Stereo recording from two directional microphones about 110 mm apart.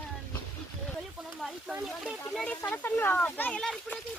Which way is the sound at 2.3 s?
5° left (ahead or behind).